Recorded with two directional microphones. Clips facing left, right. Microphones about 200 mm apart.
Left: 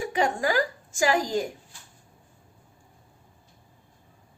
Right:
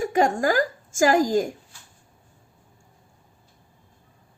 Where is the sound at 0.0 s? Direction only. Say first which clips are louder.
Right 4 dB; 45° right (ahead or behind).